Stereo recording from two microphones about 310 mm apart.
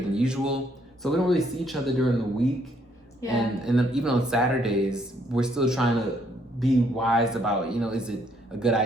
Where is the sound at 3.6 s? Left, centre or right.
Centre.